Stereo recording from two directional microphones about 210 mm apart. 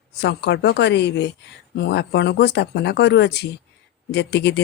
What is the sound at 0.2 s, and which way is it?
Speech, 55° left (ahead or behind).